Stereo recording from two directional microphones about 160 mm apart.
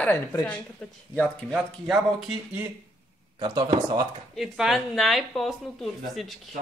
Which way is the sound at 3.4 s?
30° right (ahead or behind).